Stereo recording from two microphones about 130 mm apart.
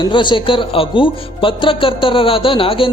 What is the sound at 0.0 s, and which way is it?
Speech, 35° left (ahead or behind).